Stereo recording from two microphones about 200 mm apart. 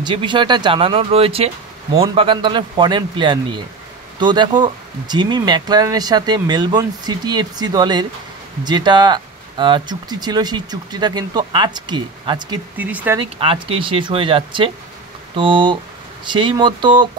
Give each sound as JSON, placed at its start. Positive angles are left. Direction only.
{"t": 0.0, "sound": "speech", "side_deg": -25}
{"t": 12.7, "sound": "speech", "side_deg": -10}
{"t": 13.2, "sound": "speech", "side_deg": -25}